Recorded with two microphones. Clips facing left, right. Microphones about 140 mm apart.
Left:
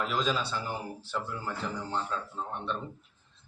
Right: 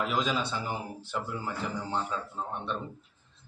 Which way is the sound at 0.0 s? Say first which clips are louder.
Right 1 dB; 15° right (ahead or behind).